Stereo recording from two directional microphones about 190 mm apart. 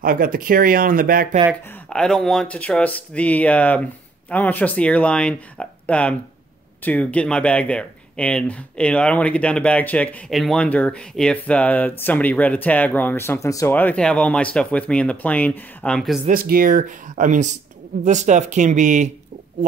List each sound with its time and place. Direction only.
0.0 s speech: 50° right (ahead or behind)
1.5 s speech: 5° left (ahead or behind)
16.3 s speech: 50° right (ahead or behind)